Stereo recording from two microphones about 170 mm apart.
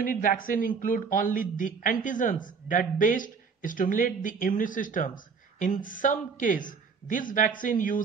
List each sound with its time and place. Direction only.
0.0 s a man's voice: 55° left (ahead or behind)